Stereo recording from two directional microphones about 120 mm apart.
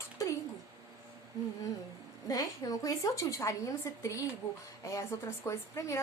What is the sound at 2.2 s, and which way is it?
A woman's voice, 30° left (ahead or behind).